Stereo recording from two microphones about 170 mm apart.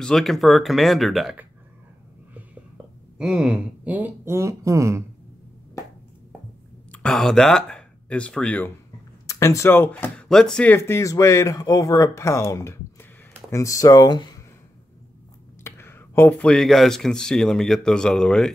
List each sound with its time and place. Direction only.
0.0 s speech: centre (ahead or behind)
3.2 s speech: 5° right (ahead or behind)
6.9 s speech: 5° left (ahead or behind); by 14.4 s 25° left (ahead or behind)
15.6 s speech: 15° left (ahead or behind)